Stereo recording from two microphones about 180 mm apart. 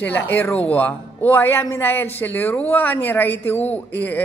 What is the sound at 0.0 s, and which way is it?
A man's voice, 10° left (ahead or behind).